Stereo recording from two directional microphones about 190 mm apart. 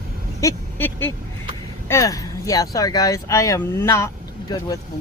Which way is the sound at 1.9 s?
15° left (ahead or behind).